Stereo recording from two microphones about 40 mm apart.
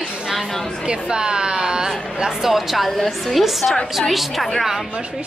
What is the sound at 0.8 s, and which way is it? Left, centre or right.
A woman's voice, right.